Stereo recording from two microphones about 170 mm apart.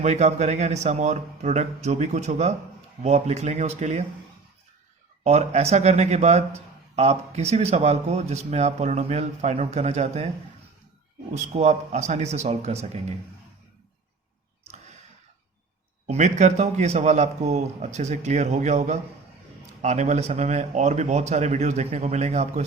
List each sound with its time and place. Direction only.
0.0 s a man's voice: 40° right (ahead or behind)
5.2 s a man's voice: 40° right (ahead or behind)
11.3 s speech: 45° right (ahead or behind)
16.0 s a man's voice: 40° right (ahead or behind)